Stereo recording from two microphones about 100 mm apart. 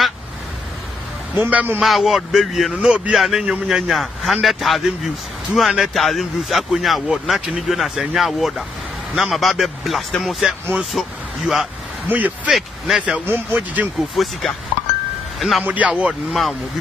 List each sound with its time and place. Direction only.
1.3 s a man's voice: 15° right (ahead or behind)
1.8 s speech: centre (ahead or behind)
12.1 s speech: 15° right (ahead or behind)
12.5 s speech: 5° right (ahead or behind)
14.1 s speech: centre (ahead or behind)
15.6 s speech: 15° right (ahead or behind)